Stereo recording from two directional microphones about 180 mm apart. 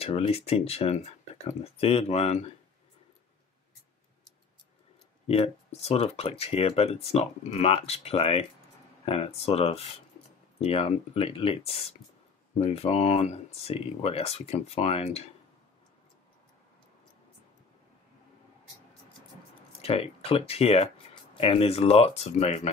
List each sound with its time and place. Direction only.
0.0 s speech: 35° left (ahead or behind)
5.2 s speech: 35° left (ahead or behind)
19.8 s speech: 35° left (ahead or behind)